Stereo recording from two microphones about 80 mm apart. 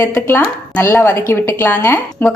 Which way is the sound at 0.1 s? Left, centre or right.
Left.